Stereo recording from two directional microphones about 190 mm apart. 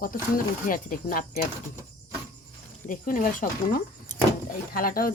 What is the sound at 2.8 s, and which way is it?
Speech, 45° left (ahead or behind).